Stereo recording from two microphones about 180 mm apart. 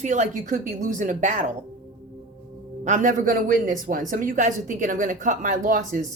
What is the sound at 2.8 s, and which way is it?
A woman's voice, 45° right (ahead or behind).